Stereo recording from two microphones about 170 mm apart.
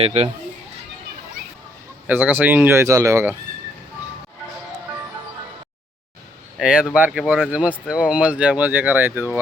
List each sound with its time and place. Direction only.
0.0 s speech: 35° right (ahead or behind)
2.0 s speech: 10° right (ahead or behind)
6.6 s speech: 5° right (ahead or behind)